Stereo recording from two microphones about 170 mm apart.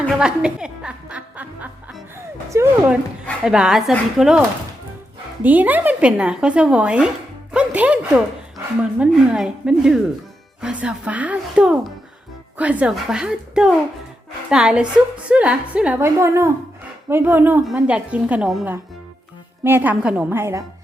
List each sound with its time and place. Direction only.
0.1 s snicker: 5° right (ahead or behind)
3.4 s a woman's voice: 5° right (ahead or behind)